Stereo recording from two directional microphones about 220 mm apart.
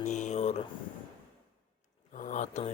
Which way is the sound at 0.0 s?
30° left (ahead or behind).